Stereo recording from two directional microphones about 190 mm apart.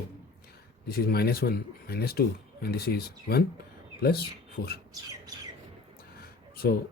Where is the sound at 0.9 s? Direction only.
55° left (ahead or behind).